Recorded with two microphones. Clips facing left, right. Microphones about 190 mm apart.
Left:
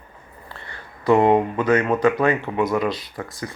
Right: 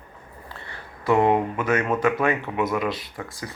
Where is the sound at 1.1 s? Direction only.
20° left (ahead or behind).